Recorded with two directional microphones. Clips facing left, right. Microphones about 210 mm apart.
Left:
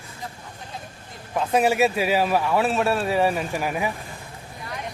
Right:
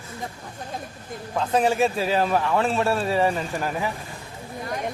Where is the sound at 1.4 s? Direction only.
10° left (ahead or behind).